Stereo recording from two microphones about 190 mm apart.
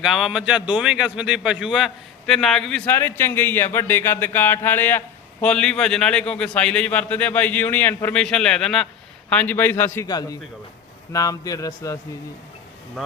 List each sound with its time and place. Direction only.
0.0 s a man's voice: centre (ahead or behind); by 11.9 s 15° left (ahead or behind)